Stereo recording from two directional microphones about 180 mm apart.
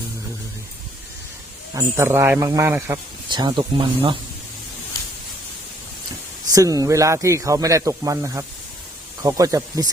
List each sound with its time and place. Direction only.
1.7 s speech: 15° right (ahead or behind)
3.2 s speech: 25° right (ahead or behind)
6.5 s speech: 20° right (ahead or behind)